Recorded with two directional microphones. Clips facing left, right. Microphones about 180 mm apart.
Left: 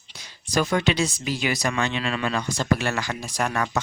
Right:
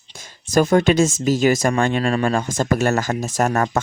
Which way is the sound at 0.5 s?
45° right (ahead or behind).